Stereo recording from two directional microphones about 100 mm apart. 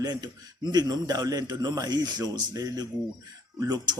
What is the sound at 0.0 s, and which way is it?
A man's voice, 45° right (ahead or behind).